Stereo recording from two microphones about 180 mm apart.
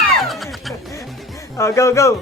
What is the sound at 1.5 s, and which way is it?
Speech, 15° left (ahead or behind).